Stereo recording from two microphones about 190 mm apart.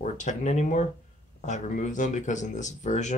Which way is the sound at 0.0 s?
40° left (ahead or behind).